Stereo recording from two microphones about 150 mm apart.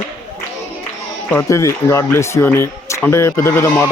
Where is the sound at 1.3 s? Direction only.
15° left (ahead or behind).